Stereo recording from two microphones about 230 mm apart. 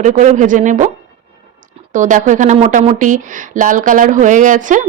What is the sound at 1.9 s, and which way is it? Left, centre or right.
Speech, right.